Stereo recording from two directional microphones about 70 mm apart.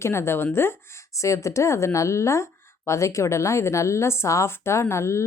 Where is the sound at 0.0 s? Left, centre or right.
Left.